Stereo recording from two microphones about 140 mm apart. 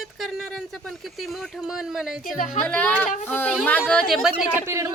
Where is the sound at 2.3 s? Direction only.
70° left (ahead or behind).